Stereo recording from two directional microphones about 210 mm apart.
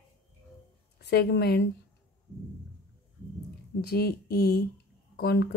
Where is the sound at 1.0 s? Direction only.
50° left (ahead or behind).